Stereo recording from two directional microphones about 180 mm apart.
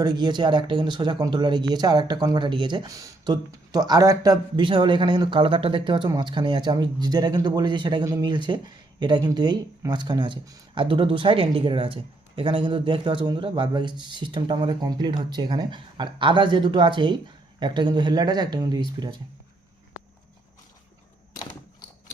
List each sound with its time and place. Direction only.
0.0 s speech: 25° right (ahead or behind)